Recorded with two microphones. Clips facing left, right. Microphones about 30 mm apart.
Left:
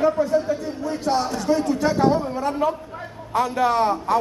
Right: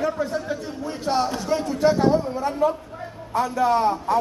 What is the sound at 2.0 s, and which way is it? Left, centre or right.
A man's voice, left.